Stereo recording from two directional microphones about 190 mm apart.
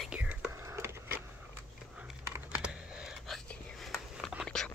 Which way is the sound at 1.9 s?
10° right (ahead or behind).